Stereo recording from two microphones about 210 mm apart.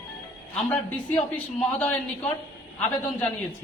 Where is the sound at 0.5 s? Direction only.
5° left (ahead or behind).